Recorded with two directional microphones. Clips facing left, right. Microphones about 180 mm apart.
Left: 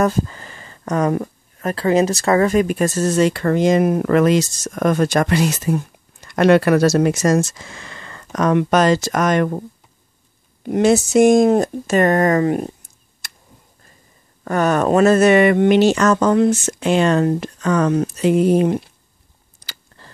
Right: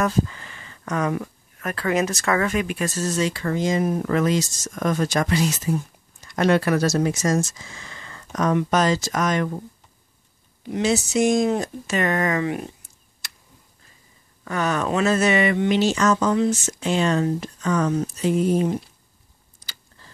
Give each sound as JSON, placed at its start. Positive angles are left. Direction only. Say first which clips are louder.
{"t": 0.0, "sound": "speech", "louder": "left 4 dB", "side_deg": 40}
{"t": 10.6, "sound": "speech", "louder": "left 7 dB", "side_deg": 55}
{"t": 13.2, "sound": "tick", "louder": "left 2 dB", "side_deg": 45}
{"t": 14.4, "sound": "speech", "louder": "left 7 dB", "side_deg": 50}
{"t": 19.6, "sound": "a sound", "louder": "left 5 dB", "side_deg": 70}